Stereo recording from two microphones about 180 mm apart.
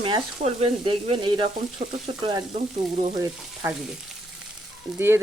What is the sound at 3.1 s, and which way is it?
Speech, 20° right (ahead or behind).